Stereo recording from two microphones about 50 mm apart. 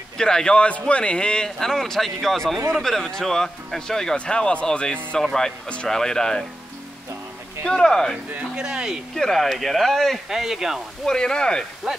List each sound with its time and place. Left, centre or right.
0.2 s a man's voice: centre
1.6 s speech: centre
7.6 s speech: centre
8.5 s speech: centre
9.1 s speech: centre
10.3 s speech: centre
11.1 s speech: centre
11.9 s speech: centre